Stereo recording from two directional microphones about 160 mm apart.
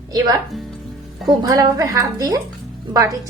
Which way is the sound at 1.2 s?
20° right (ahead or behind).